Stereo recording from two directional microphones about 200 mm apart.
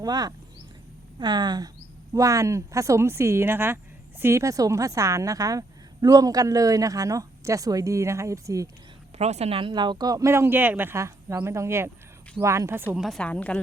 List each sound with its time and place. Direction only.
0.0 s a woman's voice: 20° right (ahead or behind)
9.1 s a woman's voice: 30° right (ahead or behind); by 13.1 s 10° right (ahead or behind)
13.1 s a woman's voice: 5° left (ahead or behind)